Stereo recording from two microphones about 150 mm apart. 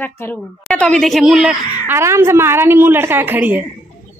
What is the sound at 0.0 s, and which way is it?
A woman's voice, 15° left (ahead or behind).